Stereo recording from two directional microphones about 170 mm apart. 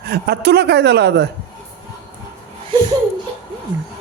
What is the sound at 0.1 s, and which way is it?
A woman's voice, 70° right (ahead or behind).